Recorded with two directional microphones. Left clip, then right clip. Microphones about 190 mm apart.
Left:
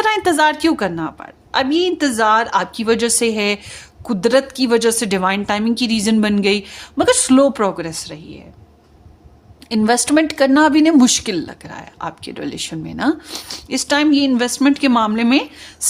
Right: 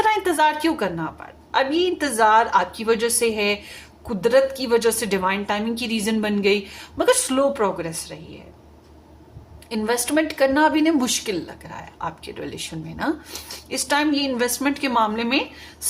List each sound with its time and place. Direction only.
0.0 s a woman's voice: 50° left (ahead or behind)
9.6 s a woman's voice: 50° left (ahead or behind)